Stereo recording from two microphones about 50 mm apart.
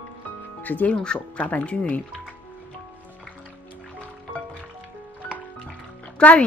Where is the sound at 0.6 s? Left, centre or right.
Left.